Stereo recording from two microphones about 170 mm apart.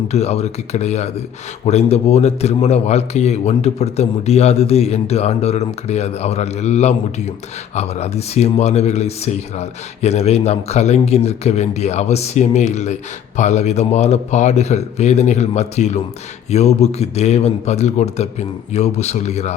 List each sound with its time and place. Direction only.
0.1 s speech: 40° left (ahead or behind)